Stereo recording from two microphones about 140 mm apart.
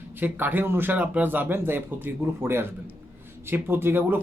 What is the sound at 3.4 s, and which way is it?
Speech, 15° right (ahead or behind).